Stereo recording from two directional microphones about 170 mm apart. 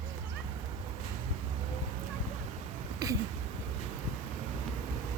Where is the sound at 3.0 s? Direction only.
20° right (ahead or behind).